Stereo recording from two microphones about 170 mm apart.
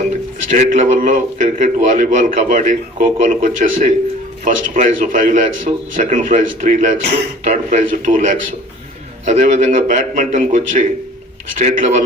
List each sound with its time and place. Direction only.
0.5 s a man's voice: 45° right (ahead or behind)
9.2 s a man's voice: 45° right (ahead or behind)